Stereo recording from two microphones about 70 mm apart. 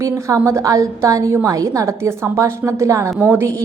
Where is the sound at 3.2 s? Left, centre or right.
Right.